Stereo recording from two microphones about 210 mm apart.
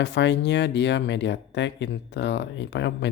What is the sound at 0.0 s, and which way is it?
Speech, 55° left (ahead or behind).